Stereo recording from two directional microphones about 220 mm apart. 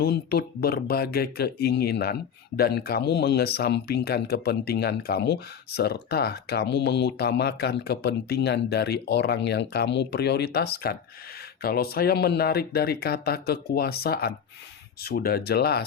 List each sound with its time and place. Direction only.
0.0 s speech: 45° left (ahead or behind)